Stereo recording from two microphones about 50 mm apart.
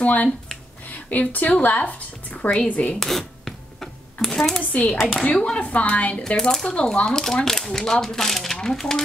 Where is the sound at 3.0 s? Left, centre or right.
Centre.